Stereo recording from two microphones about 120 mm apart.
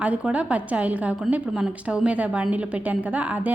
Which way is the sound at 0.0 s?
10° right (ahead or behind).